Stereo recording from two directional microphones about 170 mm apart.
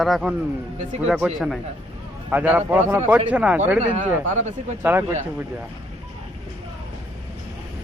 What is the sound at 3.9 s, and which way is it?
Speech, 45° right (ahead or behind).